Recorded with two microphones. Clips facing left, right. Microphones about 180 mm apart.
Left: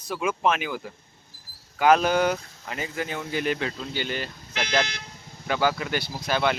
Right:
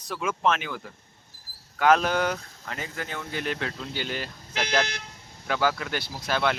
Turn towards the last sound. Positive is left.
turn(degrees=0)  # may be behind; listen again after turning